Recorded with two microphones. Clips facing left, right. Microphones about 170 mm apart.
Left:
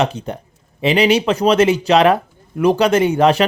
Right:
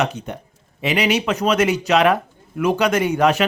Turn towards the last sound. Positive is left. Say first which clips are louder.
# left 4 dB
turn(degrees=30)  # may be behind; listen again after turning